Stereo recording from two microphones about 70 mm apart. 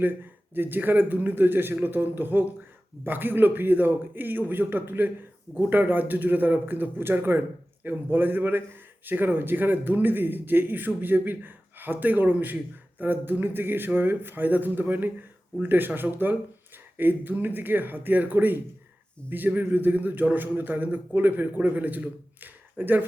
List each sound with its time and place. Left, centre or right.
0.0 s a man's voice: right